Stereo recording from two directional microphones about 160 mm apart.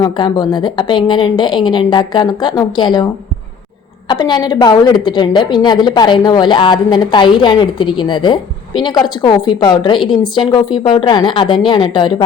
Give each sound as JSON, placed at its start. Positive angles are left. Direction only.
{"t": 0.0, "sound": "a woman's voice", "side_deg": 25}
{"t": 4.1, "sound": "a woman's voice", "side_deg": 25}